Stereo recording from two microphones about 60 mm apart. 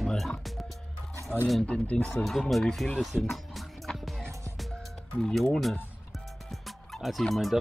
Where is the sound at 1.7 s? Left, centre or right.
Centre.